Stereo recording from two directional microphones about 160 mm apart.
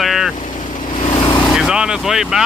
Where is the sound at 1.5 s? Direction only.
5° right (ahead or behind).